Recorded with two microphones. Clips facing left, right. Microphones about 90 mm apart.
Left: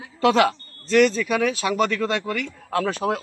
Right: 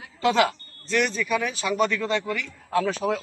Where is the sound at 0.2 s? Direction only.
60° left (ahead or behind).